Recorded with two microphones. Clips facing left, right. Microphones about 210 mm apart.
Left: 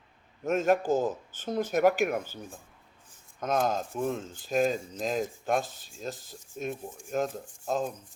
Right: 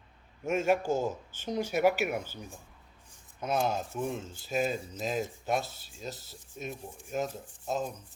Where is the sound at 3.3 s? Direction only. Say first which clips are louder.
Left 2 dB; 10° right (ahead or behind).